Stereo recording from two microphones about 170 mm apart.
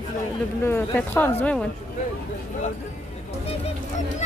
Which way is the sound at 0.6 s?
10° left (ahead or behind).